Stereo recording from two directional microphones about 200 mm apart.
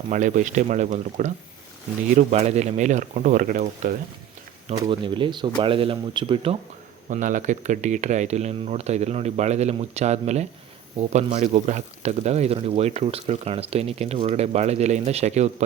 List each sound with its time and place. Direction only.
0.1 s speech: 40° right (ahead or behind)
4.7 s speech: 20° right (ahead or behind)
7.1 s speech: 40° right (ahead or behind)